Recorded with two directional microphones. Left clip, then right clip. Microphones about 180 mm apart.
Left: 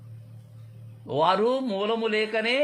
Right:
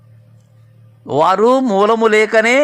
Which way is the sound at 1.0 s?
35° right (ahead or behind).